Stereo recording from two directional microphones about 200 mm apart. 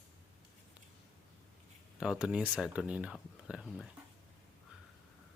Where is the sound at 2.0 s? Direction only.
5° right (ahead or behind).